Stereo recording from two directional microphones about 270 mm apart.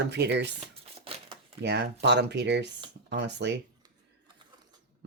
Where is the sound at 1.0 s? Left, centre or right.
Centre.